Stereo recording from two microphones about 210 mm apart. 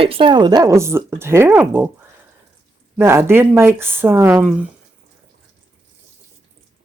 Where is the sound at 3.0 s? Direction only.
10° right (ahead or behind).